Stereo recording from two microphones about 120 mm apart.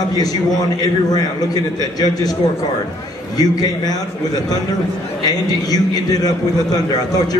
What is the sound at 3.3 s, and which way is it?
Speech, 30° left (ahead or behind).